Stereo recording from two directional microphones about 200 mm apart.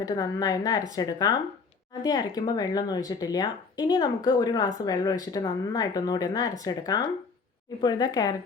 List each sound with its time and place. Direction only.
0.0 s speech: 20° left (ahead or behind)